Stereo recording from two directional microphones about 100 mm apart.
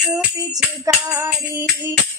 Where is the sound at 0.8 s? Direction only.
30° right (ahead or behind).